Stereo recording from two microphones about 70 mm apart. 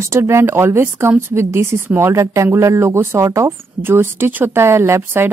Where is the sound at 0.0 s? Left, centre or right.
Right.